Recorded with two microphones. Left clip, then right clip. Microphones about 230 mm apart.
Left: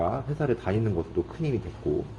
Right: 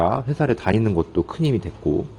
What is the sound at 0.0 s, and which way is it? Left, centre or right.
A man's voice, right.